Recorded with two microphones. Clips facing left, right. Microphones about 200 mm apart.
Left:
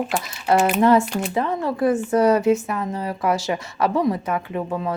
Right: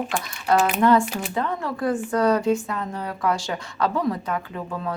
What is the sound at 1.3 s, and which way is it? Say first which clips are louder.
A woman's voice: left 4 dB; 20° left (ahead or behind).